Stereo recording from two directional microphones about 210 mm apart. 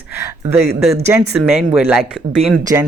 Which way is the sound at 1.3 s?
Centre (ahead or behind).